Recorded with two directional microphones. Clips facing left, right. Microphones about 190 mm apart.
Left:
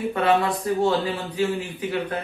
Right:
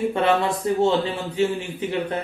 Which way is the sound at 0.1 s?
25° right (ahead or behind).